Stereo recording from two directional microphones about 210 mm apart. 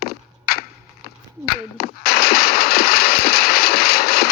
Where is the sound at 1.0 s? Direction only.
45° left (ahead or behind).